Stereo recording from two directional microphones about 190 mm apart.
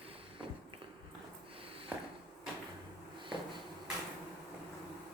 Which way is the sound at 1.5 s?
30° right (ahead or behind).